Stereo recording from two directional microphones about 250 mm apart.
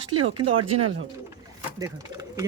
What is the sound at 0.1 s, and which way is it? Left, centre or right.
Speech, right.